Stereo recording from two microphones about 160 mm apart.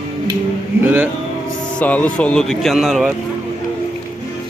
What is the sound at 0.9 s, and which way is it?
Speech, 10° right (ahead or behind).